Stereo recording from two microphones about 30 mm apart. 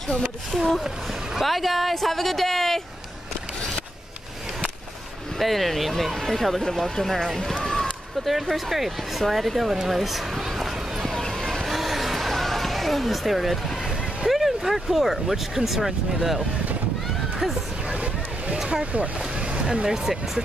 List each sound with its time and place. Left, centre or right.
0.2 s a woman's voice: centre
5.4 s speech: centre
7.5 s run: centre
8.3 s speech: centre
11.1 s vehicle: centre
11.6 s a sound: centre
13.8 s speech: centre
19.4 s a sound: right
19.9 s speech: right